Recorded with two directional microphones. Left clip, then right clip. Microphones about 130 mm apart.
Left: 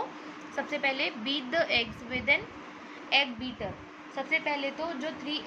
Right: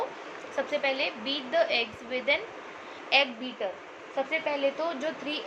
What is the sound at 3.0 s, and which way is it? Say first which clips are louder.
A woman's voice: right 2 dB; 10° left (ahead or behind).